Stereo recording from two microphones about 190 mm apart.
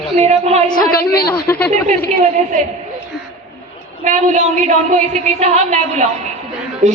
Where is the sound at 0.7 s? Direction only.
50° left (ahead or behind).